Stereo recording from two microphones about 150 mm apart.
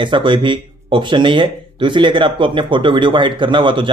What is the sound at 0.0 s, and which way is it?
Speech, 35° right (ahead or behind).